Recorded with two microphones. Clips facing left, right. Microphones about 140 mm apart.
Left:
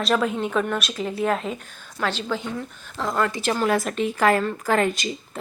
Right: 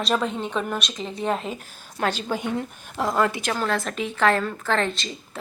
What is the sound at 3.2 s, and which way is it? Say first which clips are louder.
Speech: right 1 dB; 10° right (ahead or behind).